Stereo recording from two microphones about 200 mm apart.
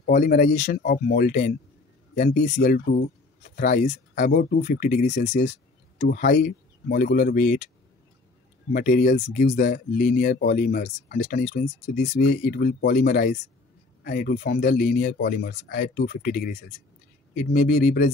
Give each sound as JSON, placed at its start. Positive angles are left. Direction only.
{"t": 0.0, "sound": "speech", "side_deg": 40}
{"t": 8.7, "sound": "speech", "side_deg": 40}